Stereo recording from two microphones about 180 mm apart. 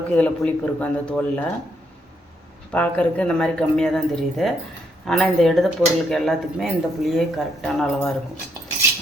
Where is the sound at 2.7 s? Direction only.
10° left (ahead or behind).